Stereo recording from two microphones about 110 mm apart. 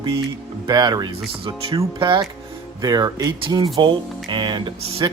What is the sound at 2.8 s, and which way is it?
Speech, 35° right (ahead or behind).